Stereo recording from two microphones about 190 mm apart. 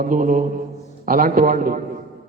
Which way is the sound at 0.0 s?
45° right (ahead or behind).